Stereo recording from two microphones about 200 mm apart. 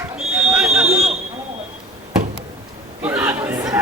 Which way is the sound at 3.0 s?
10° right (ahead or behind).